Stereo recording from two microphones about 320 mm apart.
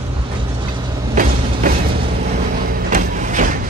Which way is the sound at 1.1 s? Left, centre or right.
Right.